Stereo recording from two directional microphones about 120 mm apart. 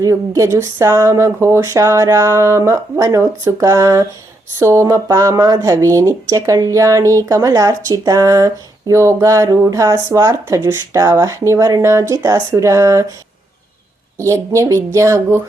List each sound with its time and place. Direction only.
0.0 s speech: 25° right (ahead or behind)
14.2 s speech: 25° right (ahead or behind)